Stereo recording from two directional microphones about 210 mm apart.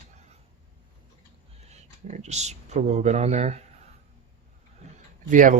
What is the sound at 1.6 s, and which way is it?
Speech, 30° right (ahead or behind).